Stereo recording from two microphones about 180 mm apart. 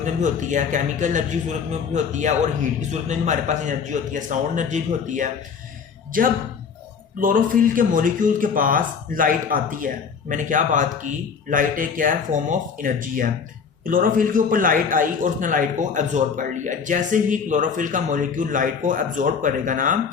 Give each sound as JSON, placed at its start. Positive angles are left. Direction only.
{"t": 0.0, "sound": "a man's voice", "side_deg": -45}